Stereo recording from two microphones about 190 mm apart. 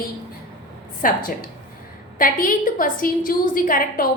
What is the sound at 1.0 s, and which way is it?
A woman's voice, 50° left (ahead or behind).